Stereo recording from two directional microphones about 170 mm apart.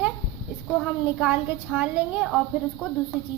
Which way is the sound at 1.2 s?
5° right (ahead or behind).